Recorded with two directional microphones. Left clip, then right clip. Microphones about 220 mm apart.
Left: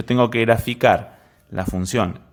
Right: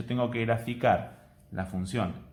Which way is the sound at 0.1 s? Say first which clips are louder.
Left 12 dB; 45° left (ahead or behind).